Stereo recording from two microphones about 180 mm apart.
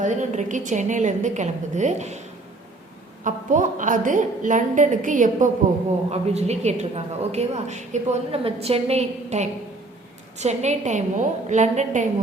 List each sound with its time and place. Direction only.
0.0 s a woman's voice: 40° right (ahead or behind)
3.2 s a woman's voice: 45° right (ahead or behind)